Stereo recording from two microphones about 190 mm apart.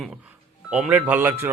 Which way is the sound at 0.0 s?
Centre (ahead or behind).